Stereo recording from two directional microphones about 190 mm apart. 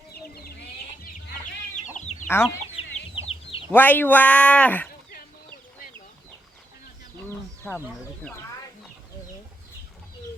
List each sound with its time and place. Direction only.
0.1 s chicken: 55° left (ahead or behind)
1.7 s chicken: 40° left (ahead or behind)
2.2 s speech: 10° left (ahead or behind)
2.8 s chicken: 30° left (ahead or behind)
3.7 s speech: 10° left (ahead or behind)
7.3 s a sound: 10° left (ahead or behind)
8.2 s speech: 10° left (ahead or behind)